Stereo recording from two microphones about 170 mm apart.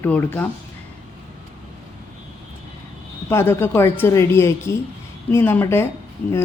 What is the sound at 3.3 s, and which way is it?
A woman's voice, 15° left (ahead or behind).